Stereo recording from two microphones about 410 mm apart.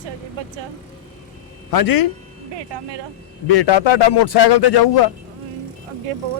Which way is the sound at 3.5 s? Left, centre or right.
Left.